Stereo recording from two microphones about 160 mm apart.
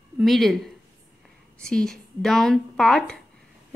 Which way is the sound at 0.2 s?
Centre (ahead or behind).